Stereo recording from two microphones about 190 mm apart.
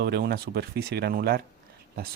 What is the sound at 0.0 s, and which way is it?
Speech, 60° right (ahead or behind).